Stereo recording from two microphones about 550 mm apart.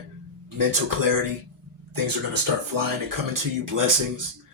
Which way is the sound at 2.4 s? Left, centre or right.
Right.